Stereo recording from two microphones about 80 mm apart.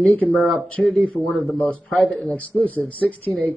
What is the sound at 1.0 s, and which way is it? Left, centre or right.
A man's voice, centre.